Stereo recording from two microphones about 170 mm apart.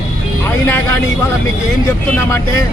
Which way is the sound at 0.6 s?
10° left (ahead or behind).